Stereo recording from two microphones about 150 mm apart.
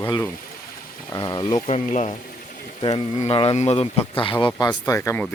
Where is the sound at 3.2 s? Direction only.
40° left (ahead or behind); by 5.2 s 20° left (ahead or behind).